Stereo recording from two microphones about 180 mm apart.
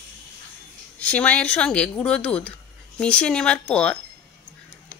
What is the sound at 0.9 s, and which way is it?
Speech, 10° left (ahead or behind).